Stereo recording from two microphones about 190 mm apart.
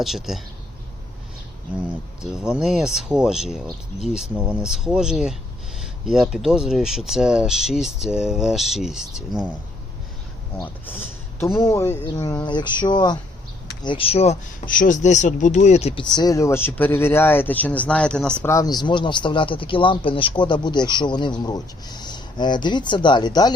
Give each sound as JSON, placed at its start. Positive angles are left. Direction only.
{"t": 0.0, "sound": "speech", "side_deg": 0}
{"t": 2.3, "sound": "speech", "side_deg": -5}
{"t": 10.8, "sound": "speech", "side_deg": 10}
{"t": 18.4, "sound": "speech", "side_deg": 20}